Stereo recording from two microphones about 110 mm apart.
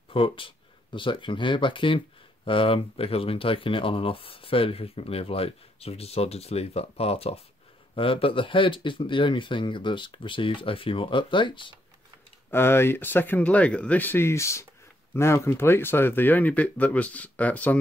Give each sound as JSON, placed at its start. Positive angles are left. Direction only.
{"t": 0.1, "sound": "speech", "side_deg": 50}
{"t": 7.9, "sound": "speech", "side_deg": 55}
{"t": 12.4, "sound": "speech", "side_deg": 20}